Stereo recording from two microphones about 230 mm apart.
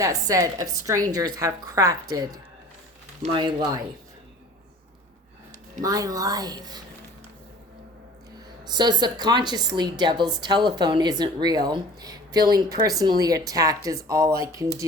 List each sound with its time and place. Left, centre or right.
0.0 s a woman's voice: centre
5.8 s a woman's voice: centre
8.6 s a woman's voice: centre